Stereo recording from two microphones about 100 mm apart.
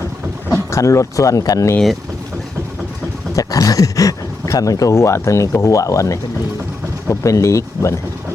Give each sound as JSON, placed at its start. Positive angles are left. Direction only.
{"t": 0.7, "sound": "speech", "side_deg": 30}
{"t": 3.3, "sound": "speech", "side_deg": 35}